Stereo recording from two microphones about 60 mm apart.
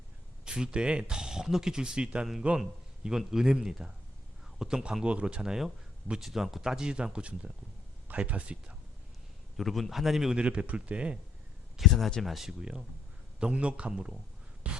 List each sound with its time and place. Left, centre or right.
0.4 s a man's voice: centre
9.6 s speech: centre
10.4 s speech: right
11.8 s speech: centre
14.6 s a sound: right